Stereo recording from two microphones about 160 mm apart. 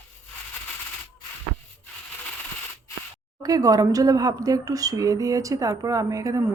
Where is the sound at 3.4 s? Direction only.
25° right (ahead or behind).